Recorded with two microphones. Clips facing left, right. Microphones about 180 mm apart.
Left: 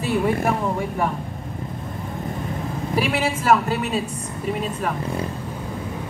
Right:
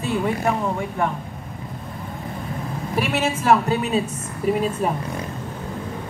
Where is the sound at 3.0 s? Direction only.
5° left (ahead or behind).